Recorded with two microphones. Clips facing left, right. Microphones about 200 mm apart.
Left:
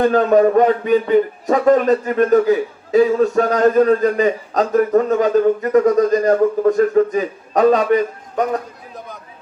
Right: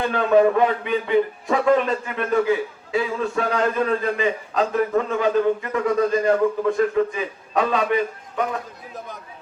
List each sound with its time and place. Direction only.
0.0 s a man's voice: 40° left (ahead or behind)